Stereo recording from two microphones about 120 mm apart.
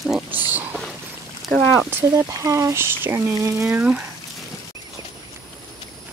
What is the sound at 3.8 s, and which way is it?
Speech, 10° right (ahead or behind).